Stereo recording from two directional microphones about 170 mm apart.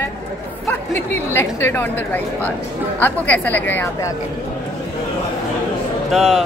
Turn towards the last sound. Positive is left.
turn(degrees=0)  # may be behind; listen again after turning